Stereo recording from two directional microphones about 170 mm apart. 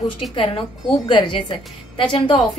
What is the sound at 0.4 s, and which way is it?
A woman's voice, 30° left (ahead or behind).